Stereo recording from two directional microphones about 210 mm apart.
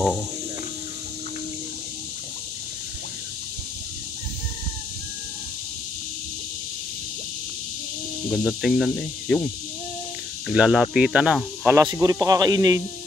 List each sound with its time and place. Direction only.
8.3 s speech: centre (ahead or behind)
10.5 s speech: 5° right (ahead or behind)
11.8 s speech: 15° right (ahead or behind)